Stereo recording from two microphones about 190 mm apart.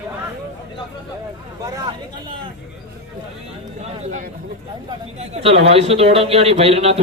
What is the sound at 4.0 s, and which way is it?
A man's voice, 40° right (ahead or behind).